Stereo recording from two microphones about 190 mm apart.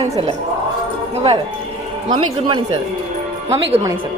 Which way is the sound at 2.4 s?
25° right (ahead or behind).